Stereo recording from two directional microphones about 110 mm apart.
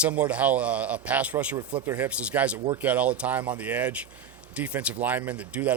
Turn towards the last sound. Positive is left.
turn(degrees=-10)  # may be behind; listen again after turning